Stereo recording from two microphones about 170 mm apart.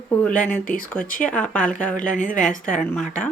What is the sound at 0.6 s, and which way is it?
Speech, 55° left (ahead or behind).